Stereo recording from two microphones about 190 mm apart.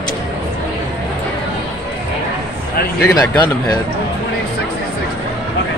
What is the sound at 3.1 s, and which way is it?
Speech, 20° left (ahead or behind).